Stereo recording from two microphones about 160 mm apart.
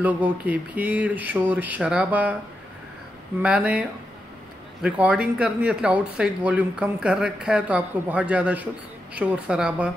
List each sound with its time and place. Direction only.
0.0 s speech: 10° right (ahead or behind)
3.4 s speech: 5° right (ahead or behind)
4.8 s speech: 5° right (ahead or behind)